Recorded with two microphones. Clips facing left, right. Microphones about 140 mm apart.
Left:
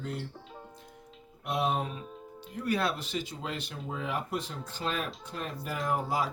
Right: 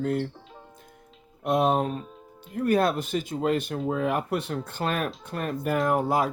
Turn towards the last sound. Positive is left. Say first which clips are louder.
# right 7 dB
turn(degrees=-55)  # may be behind; listen again after turning